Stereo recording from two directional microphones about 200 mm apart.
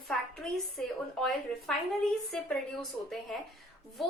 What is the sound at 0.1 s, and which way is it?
Speech, centre (ahead or behind).